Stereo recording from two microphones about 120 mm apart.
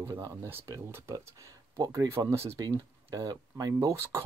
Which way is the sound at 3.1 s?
35° right (ahead or behind).